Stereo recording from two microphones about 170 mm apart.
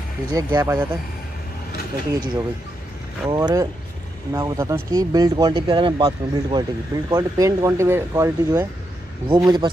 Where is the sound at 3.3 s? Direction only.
20° right (ahead or behind).